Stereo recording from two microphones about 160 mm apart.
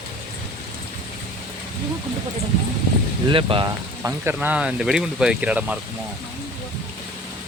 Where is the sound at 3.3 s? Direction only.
30° right (ahead or behind).